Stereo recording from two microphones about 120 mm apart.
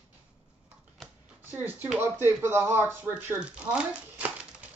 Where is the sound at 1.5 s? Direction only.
15° right (ahead or behind).